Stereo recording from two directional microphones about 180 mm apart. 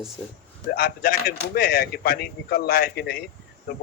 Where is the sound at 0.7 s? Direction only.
55° left (ahead or behind).